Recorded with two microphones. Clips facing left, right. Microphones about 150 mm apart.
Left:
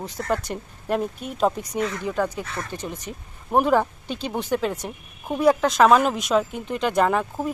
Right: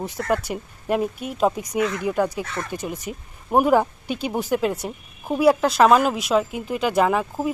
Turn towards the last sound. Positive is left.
turn(degrees=-5)  # may be behind; listen again after turning